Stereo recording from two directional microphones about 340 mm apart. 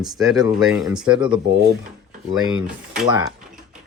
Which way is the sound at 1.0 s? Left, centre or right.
Centre.